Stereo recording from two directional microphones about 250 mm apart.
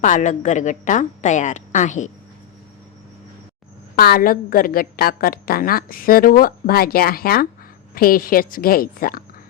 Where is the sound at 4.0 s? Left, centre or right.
Left.